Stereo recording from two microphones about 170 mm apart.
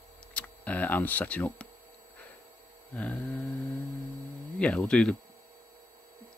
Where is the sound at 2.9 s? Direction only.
10° left (ahead or behind).